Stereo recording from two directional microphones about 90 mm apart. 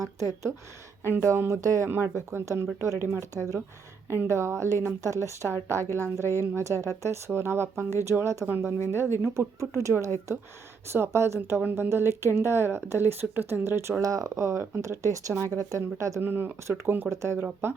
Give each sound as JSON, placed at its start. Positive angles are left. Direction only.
{"t": 0.0, "sound": "speech", "side_deg": -35}
{"t": 10.9, "sound": "speech", "side_deg": -30}
{"t": 14.0, "sound": "speech", "side_deg": -40}
{"t": 16.2, "sound": "speech", "side_deg": -25}